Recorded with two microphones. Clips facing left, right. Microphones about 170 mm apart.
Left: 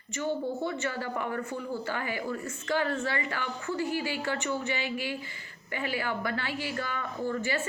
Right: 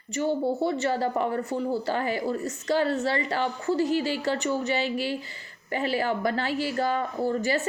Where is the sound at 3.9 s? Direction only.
15° left (ahead or behind).